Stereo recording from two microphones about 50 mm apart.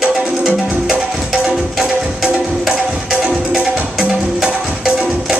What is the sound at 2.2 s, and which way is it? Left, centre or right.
Music, right.